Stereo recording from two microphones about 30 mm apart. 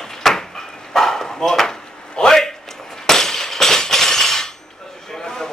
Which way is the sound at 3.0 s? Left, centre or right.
Centre.